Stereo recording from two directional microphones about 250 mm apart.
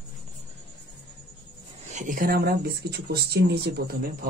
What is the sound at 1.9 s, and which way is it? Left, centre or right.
Speech, right.